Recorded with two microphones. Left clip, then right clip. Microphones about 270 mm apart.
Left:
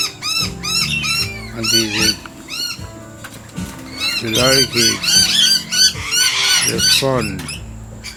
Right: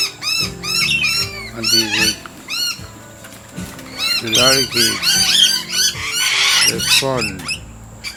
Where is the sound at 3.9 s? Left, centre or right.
Centre.